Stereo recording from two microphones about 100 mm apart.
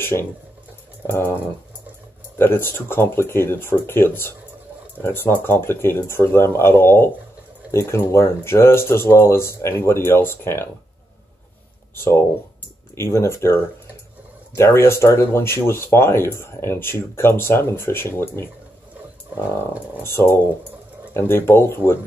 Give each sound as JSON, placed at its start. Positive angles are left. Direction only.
{"t": 0.0, "sound": "speech", "side_deg": 25}
{"t": 11.9, "sound": "speech", "side_deg": 25}
{"t": 20.0, "sound": "speech", "side_deg": 25}